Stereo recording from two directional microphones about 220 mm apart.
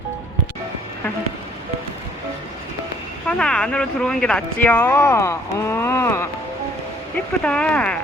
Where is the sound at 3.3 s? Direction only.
5° left (ahead or behind).